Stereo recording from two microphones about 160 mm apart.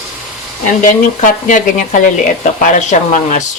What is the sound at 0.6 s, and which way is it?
Speech, 55° left (ahead or behind).